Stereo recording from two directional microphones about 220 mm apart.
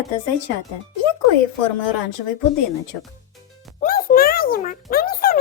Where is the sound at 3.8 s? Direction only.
40° left (ahead or behind).